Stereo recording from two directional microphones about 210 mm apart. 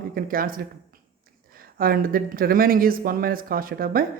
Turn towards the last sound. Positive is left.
turn(degrees=-45)  # may be behind; listen again after turning